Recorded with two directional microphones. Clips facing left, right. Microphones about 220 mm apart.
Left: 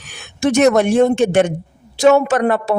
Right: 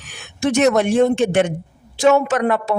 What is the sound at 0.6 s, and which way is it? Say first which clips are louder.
Speech: left 2 dB; 45° left (ahead or behind).